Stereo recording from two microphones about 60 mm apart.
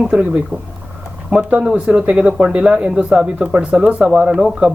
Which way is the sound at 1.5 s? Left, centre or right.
Centre.